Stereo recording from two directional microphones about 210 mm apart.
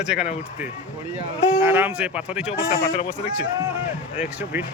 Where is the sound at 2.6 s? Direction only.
45° left (ahead or behind).